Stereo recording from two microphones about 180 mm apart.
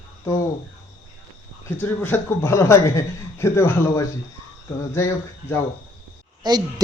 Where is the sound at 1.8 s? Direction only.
10° left (ahead or behind).